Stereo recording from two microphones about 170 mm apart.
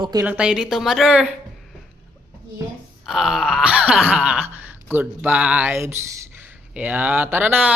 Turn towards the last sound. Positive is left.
turn(degrees=-10)  # may be behind; listen again after turning